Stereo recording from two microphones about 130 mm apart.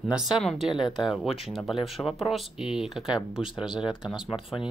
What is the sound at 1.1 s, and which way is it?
Speech, centre (ahead or behind).